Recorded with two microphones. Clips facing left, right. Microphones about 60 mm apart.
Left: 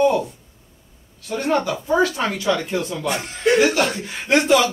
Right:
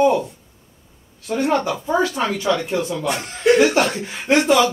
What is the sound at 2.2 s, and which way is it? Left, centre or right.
Speech, centre.